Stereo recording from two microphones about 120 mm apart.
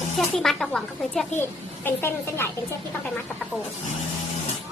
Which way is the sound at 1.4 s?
20° left (ahead or behind).